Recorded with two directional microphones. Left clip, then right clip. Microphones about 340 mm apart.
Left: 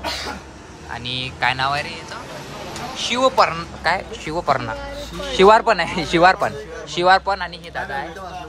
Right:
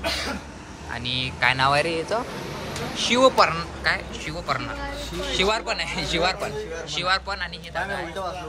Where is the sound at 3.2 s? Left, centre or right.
Centre.